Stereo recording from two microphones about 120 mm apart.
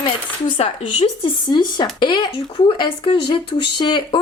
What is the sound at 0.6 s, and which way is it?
Speech, 60° left (ahead or behind).